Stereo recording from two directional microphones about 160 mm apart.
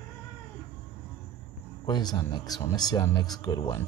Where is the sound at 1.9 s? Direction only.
25° left (ahead or behind).